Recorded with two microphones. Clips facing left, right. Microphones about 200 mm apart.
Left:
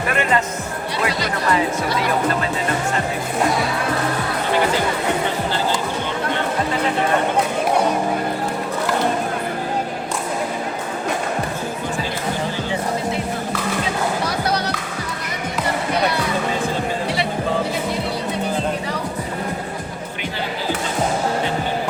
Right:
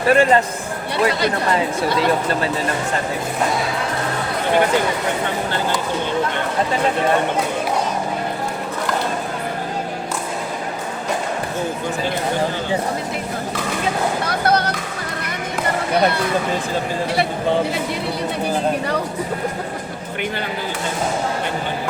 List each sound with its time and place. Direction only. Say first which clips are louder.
0.1 s speech: right 7 dB; 35° right (ahead or behind)
14.3 s music: right 3 dB; 55° right (ahead or behind)